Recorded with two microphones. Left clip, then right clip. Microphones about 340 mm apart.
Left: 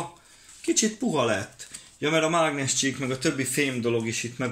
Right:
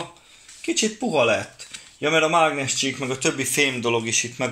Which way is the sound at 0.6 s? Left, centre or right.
Centre.